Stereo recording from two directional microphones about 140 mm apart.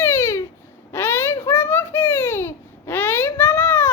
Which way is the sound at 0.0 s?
15° left (ahead or behind).